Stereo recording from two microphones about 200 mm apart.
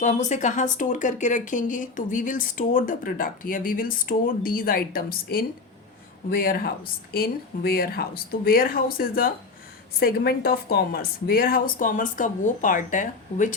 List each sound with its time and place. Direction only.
0.0 s a woman's voice: 35° left (ahead or behind)